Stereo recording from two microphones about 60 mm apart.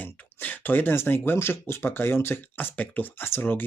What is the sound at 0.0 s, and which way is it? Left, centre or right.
Speech, left.